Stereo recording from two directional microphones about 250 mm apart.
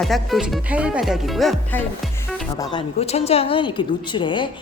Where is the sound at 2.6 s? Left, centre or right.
Centre.